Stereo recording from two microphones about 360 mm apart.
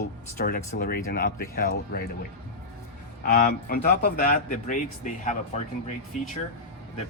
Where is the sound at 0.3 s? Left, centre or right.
Left.